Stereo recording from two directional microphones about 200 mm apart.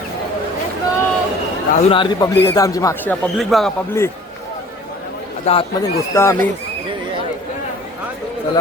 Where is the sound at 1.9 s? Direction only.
20° left (ahead or behind); by 3.7 s centre (ahead or behind).